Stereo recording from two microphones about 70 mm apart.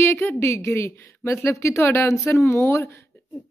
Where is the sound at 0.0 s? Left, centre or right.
Left.